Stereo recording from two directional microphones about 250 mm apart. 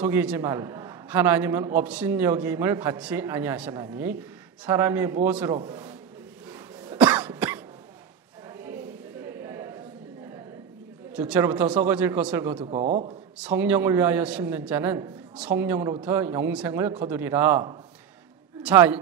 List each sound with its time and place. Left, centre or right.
0.0 s a man's voice: centre
6.9 s cough: centre
8.5 s a sound: centre
11.1 s a man's voice: centre
12.6 s a man's voice: right
13.4 s a man's voice: centre